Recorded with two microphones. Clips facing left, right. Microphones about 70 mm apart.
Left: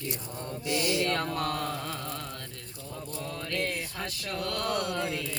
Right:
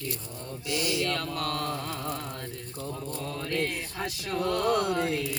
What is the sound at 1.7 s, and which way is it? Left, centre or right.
Mantra, centre.